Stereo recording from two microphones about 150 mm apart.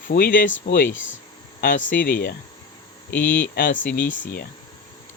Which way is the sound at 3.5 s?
65° left (ahead or behind).